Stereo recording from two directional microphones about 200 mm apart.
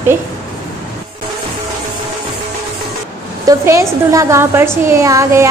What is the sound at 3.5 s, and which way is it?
A woman's voice, 15° right (ahead or behind).